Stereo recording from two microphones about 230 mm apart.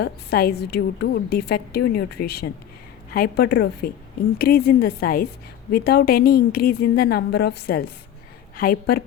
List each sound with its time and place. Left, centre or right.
0.0 s a woman's voice: left